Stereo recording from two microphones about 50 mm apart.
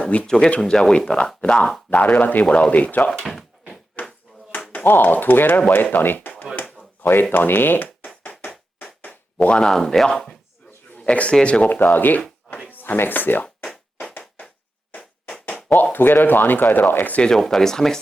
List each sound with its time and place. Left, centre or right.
0.0 s speech: left
0.3 s speech: centre; by 2.5 s left
2.5 s speech: left
3.1 s drawer open or close: centre
4.0 s a sound: left
4.9 s speech: left
7.9 s a sound: left
9.5 s speech: centre
10.9 s a man's voice: left
11.7 s speech: left
14.1 s a sound: left
15.4 s speech: left
17.3 s speech: centre